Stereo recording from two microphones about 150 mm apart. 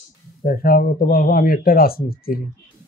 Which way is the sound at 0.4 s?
80° left.